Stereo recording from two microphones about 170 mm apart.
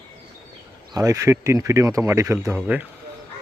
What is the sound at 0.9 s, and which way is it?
Speech, 20° right (ahead or behind).